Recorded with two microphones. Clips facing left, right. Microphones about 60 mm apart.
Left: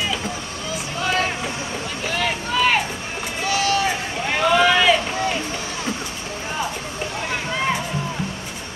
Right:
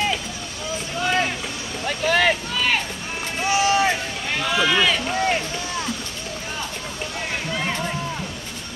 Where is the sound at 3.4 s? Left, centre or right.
Right.